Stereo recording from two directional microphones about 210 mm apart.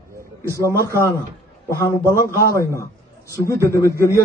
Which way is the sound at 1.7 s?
10° left (ahead or behind).